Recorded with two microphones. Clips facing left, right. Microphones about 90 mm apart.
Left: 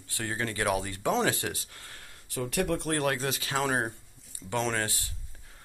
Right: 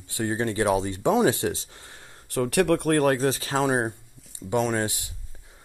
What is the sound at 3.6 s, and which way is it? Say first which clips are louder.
Speech: right 5 dB; 20° right (ahead or behind).